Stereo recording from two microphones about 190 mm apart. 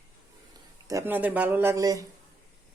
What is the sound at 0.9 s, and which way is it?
A man's voice, 15° right (ahead or behind).